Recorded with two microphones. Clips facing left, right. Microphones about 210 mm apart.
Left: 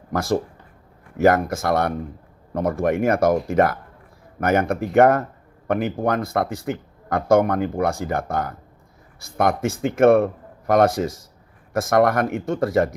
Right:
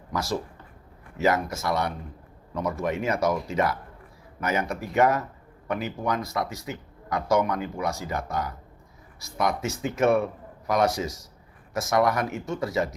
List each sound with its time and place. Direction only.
0.1 s speech: 55° left (ahead or behind)